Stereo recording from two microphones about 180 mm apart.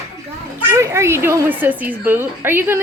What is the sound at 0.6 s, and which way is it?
A woman's voice, 15° right (ahead or behind).